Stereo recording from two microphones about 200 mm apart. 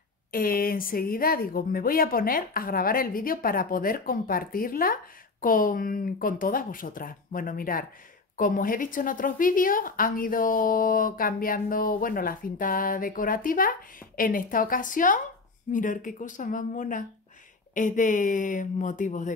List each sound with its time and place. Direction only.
0.3 s speech: 45° left (ahead or behind)